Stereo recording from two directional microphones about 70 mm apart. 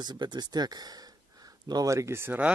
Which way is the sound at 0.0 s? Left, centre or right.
Right.